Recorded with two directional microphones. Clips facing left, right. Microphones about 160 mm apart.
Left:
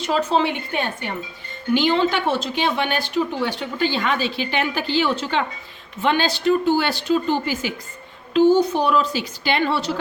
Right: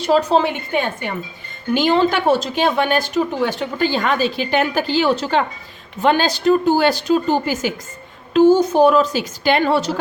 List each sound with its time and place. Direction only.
0.0 s speech: 35° right (ahead or behind)